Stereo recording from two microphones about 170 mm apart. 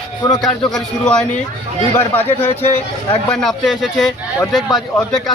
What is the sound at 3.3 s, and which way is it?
Speech, centre (ahead or behind).